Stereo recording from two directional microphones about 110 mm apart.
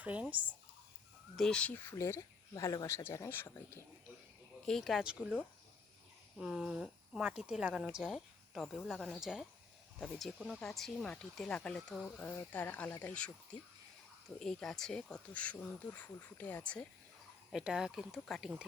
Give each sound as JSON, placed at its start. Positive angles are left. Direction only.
{"t": 0.0, "sound": "speech", "side_deg": -15}
{"t": 1.4, "sound": "speech", "side_deg": 5}
{"t": 4.6, "sound": "speech", "side_deg": 0}
{"t": 8.1, "sound": "speech", "side_deg": 5}
{"t": 17.5, "sound": "speech", "side_deg": -5}